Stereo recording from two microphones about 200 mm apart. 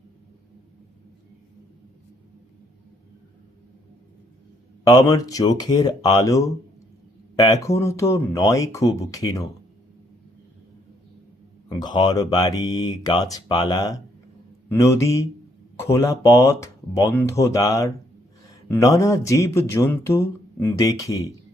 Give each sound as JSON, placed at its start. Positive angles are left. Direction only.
{"t": 4.8, "sound": "speech", "side_deg": 20}
{"t": 11.8, "sound": "speech", "side_deg": 20}